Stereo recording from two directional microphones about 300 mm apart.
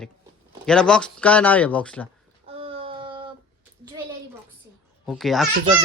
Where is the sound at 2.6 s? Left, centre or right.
Centre.